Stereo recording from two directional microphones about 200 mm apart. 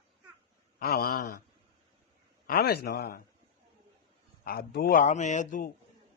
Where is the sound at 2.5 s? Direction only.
50° left (ahead or behind).